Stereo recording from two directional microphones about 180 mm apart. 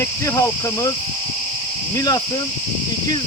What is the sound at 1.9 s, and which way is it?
Speech, 20° left (ahead or behind).